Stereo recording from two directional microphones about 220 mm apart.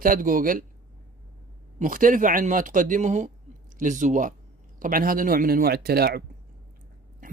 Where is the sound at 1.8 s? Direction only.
40° right (ahead or behind).